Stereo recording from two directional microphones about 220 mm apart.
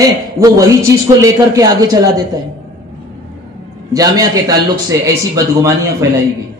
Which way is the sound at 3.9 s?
15° right (ahead or behind).